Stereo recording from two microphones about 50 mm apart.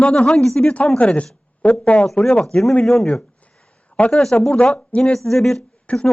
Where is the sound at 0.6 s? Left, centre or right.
Left.